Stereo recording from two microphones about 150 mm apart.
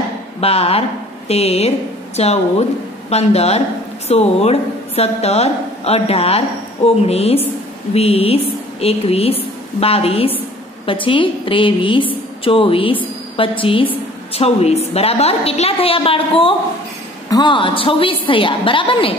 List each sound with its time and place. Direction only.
0.4 s a woman's voice: 40° left (ahead or behind)